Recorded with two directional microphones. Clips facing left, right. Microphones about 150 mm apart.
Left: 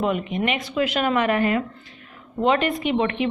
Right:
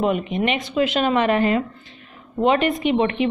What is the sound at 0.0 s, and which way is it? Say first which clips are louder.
A woman's voice: right 2 dB; 20° right (ahead or behind).